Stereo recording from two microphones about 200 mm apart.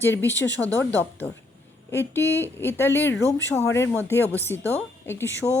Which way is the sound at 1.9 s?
10° left (ahead or behind).